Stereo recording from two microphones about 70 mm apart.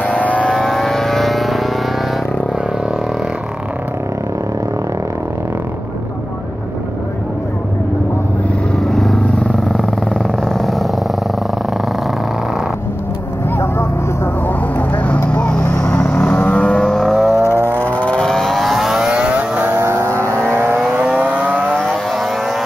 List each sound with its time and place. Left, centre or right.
0.0 s vehicle: left
0.6 s vehicle: centre
8.7 s vehicle: centre
13.6 s vehicle: left
14.8 s vehicle: left; by 17.4 s centre
17.4 s vehicle: left
18.2 s vehicle: centre; by 19.8 s right
19.8 s vehicle: right
21.0 s vehicle: centre
21.7 s vehicle: centre